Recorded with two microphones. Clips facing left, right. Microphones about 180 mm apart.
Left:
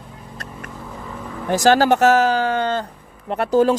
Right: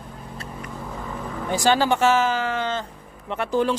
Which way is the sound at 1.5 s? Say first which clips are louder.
Left 5 dB; 45° left (ahead or behind).